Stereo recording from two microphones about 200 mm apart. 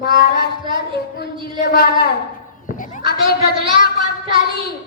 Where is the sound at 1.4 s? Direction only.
55° left (ahead or behind).